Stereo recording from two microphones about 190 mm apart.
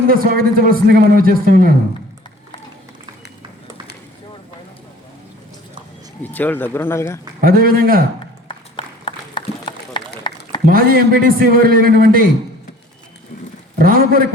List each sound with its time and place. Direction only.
0.1 s a man's voice: 50° right (ahead or behind)
6.2 s speech: 10° left (ahead or behind)
7.4 s a man's voice: 50° right (ahead or behind)
8.4 s run: 25° left (ahead or behind)
10.3 s a sound: 25° left (ahead or behind)
10.7 s a man's voice: 50° right (ahead or behind)
13.7 s a man's voice: 50° right (ahead or behind)